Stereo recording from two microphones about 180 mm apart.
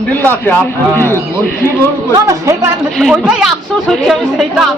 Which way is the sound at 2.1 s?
15° right (ahead or behind).